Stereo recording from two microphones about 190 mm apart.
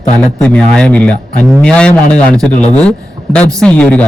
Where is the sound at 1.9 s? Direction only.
35° left (ahead or behind).